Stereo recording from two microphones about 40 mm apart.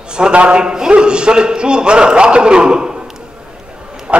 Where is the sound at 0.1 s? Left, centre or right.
Right.